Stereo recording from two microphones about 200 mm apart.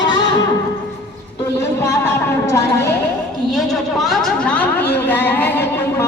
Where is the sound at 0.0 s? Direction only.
20° left (ahead or behind).